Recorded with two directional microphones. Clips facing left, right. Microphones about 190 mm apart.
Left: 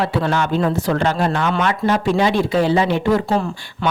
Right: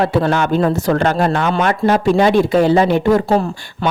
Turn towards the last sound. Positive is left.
turn(degrees=-35)  # may be behind; listen again after turning